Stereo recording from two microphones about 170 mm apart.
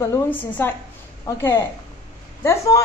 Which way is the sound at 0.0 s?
15° left (ahead or behind).